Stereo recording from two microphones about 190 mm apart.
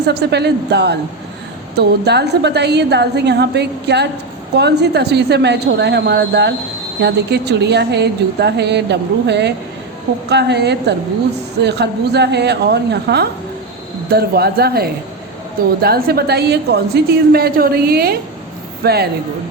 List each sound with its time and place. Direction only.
0.0 s a woman's voice: 60° right (ahead or behind)